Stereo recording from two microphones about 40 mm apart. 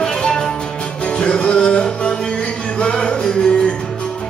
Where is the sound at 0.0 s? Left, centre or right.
Centre.